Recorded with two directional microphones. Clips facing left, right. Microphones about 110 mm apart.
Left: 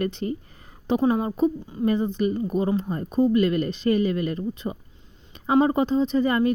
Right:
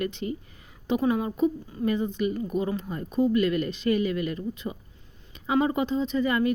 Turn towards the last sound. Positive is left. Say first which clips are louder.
# left 3 dB
turn(degrees=35)  # may be behind; listen again after turning